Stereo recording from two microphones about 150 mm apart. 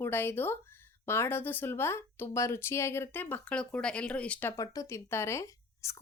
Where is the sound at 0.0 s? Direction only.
15° left (ahead or behind).